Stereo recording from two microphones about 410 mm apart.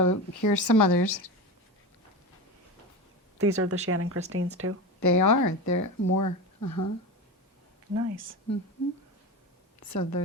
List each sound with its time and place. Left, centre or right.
0.0 s speech: left
3.3 s speech: right
4.9 s speech: left
7.9 s speech: right
9.9 s a woman's voice: left